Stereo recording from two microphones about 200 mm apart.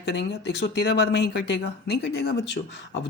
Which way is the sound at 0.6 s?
55° left (ahead or behind).